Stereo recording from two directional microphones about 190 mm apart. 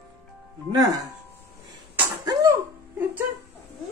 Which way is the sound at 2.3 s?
15° right (ahead or behind).